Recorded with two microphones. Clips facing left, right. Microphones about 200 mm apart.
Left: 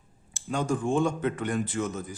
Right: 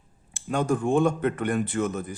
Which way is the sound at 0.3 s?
60° right (ahead or behind).